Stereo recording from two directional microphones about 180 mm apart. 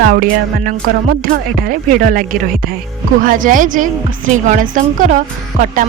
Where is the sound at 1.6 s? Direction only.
50° right (ahead or behind).